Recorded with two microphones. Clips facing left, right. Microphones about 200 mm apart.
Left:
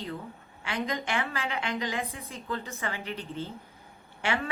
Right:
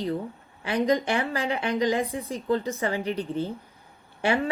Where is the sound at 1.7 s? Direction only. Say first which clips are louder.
Right 12 dB; 15° right (ahead or behind).